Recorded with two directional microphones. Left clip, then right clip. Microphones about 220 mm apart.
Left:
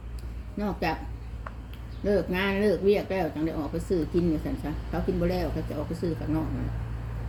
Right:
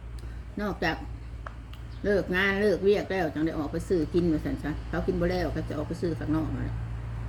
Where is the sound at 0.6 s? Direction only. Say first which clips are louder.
Even; 20° right (ahead or behind).